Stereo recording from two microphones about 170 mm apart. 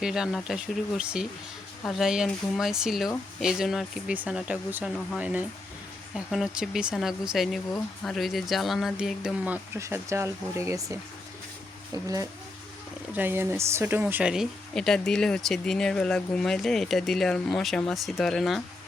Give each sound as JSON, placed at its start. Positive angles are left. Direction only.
{"t": 0.0, "sound": "speech", "side_deg": -5}
{"t": 9.7, "sound": "speech", "side_deg": -15}
{"t": 13.1, "sound": "speech", "side_deg": -10}